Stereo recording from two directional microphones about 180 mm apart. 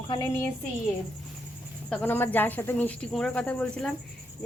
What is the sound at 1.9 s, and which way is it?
Speech, 10° left (ahead or behind).